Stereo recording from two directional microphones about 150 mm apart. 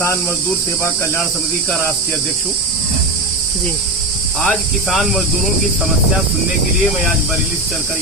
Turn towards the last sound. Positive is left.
turn(degrees=0)  # may be behind; listen again after turning